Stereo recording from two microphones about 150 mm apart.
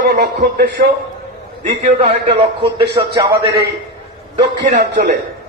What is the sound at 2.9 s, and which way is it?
Speech, 30° right (ahead or behind).